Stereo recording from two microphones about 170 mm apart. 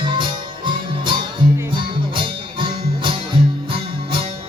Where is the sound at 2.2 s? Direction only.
30° right (ahead or behind).